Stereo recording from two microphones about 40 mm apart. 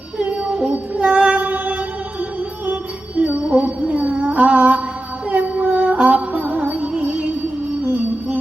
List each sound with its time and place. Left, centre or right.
0.2 s music: right
3.2 s female singing: right
5.3 s music: right